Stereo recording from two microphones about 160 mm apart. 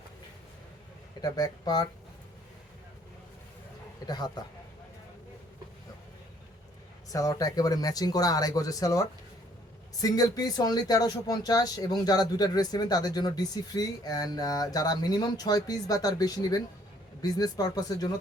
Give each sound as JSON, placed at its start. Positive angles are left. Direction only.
{"t": 1.2, "sound": "speech", "side_deg": 25}
{"t": 4.0, "sound": "speech", "side_deg": 25}
{"t": 7.1, "sound": "speech", "side_deg": 20}